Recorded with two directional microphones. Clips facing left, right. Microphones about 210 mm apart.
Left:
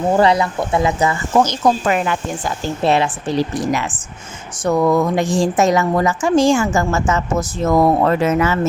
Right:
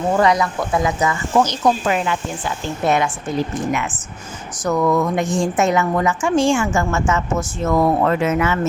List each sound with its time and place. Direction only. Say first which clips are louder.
0.2 s speech: left 2 dB; 30° left (ahead or behind)
1.9 s speech: left 2 dB; 50° left (ahead or behind)
2.8 s a woman's voice: left 2 dB; 30° left (ahead or behind)